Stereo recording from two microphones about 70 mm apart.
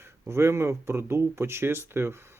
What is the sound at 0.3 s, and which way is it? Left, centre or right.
Speech, right.